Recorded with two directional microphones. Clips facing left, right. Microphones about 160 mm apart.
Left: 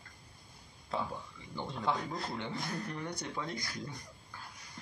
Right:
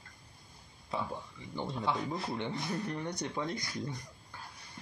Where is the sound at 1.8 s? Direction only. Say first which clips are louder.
Even; 5° right (ahead or behind).